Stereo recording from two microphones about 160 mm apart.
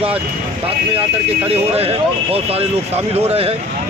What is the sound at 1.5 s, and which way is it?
Speech, 40° right (ahead or behind).